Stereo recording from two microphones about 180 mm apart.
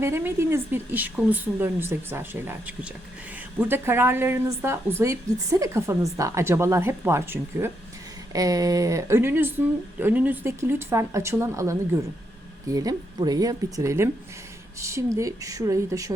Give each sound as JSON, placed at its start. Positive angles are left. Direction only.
{"t": 0.0, "sound": "a woman's voice", "side_deg": -10}